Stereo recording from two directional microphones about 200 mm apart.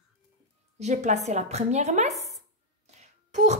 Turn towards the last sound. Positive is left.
turn(degrees=-35)  # may be behind; listen again after turning